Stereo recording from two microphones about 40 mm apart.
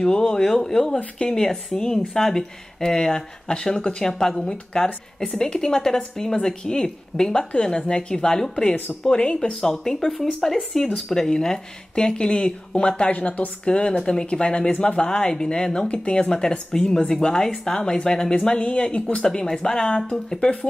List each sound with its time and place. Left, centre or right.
0.0 s speech: left
9.6 s speech: centre
13.1 s a woman's voice: left
13.7 s speech: left
19.2 s speech: centre